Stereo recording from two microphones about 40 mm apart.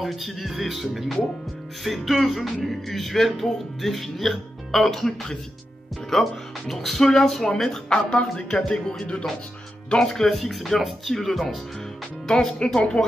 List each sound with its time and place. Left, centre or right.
0.0 s speech: centre
8.1 s speech: left
10.0 s speech: centre
12.4 s speech: centre